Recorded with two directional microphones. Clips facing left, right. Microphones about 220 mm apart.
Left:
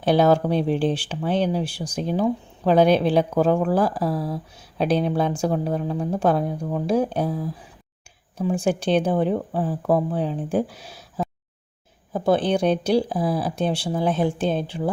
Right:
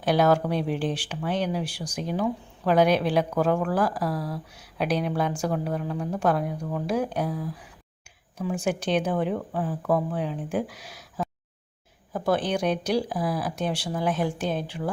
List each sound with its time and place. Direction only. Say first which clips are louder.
0.0 s speech: left 4 dB; 25° left (ahead or behind)
12.1 s speech: left 5 dB; 25° left (ahead or behind)